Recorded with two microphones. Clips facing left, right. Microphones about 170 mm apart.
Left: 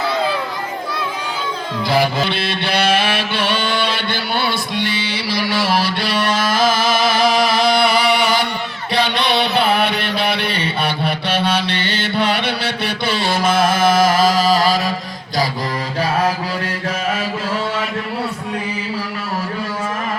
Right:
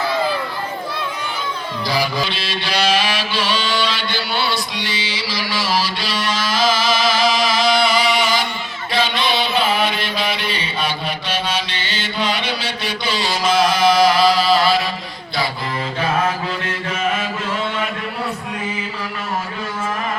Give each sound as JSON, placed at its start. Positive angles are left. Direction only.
{"t": 2.2, "sound": "music", "side_deg": 60}
{"t": 8.9, "sound": "mantra", "side_deg": 65}
{"t": 16.0, "sound": "mantra", "side_deg": 35}